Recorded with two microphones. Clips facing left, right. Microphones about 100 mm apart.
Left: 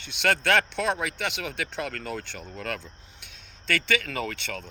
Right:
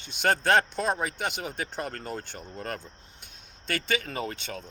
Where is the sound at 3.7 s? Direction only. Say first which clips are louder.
Left 3 dB; 70° left (ahead or behind).